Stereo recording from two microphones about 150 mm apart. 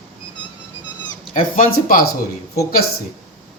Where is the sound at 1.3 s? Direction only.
65° left (ahead or behind).